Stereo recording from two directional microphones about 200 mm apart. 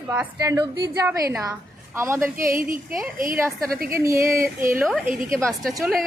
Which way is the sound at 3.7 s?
45° right (ahead or behind).